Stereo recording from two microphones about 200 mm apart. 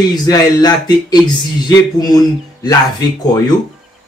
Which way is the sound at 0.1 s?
20° left (ahead or behind).